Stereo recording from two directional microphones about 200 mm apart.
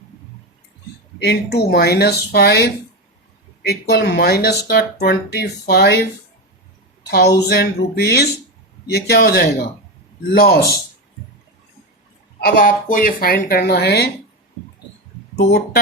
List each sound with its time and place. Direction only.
1.2 s speech: 55° left (ahead or behind)
7.1 s speech: 55° left (ahead or behind)
12.4 s speech: 45° left (ahead or behind)